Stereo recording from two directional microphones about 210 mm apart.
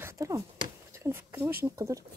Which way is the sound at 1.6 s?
15° right (ahead or behind).